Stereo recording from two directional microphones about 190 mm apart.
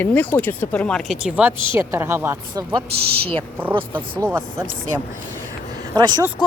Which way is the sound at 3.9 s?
10° right (ahead or behind).